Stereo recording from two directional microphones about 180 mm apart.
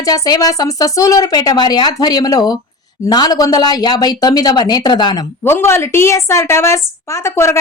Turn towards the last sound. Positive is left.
turn(degrees=15)  # may be behind; listen again after turning